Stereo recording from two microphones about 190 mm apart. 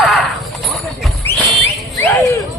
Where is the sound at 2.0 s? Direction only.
15° left (ahead or behind).